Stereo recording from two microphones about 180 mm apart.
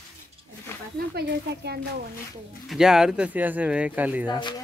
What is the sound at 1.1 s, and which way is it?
Speech, 65° right (ahead or behind).